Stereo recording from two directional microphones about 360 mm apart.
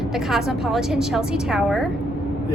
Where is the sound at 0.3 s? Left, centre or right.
Centre.